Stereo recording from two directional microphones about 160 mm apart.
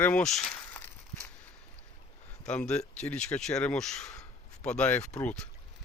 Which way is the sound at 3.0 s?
5° left (ahead or behind).